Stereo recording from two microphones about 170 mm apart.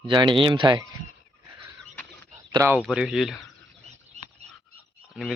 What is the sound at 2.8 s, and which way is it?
Speech, 5° right (ahead or behind).